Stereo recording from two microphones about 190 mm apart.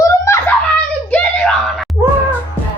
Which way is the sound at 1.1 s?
5° left (ahead or behind).